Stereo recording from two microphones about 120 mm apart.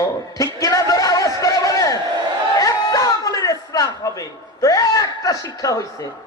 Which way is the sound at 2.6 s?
30° left (ahead or behind).